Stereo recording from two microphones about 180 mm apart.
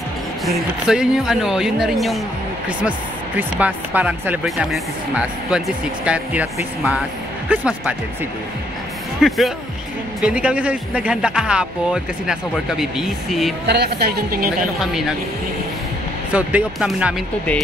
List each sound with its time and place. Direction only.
0.5 s a man's voice: centre (ahead or behind)
3.3 s a man's voice: 10° right (ahead or behind)
9.2 s a man's voice: centre (ahead or behind)
13.7 s speech: 65° right (ahead or behind)
16.3 s speech: 5° right (ahead or behind)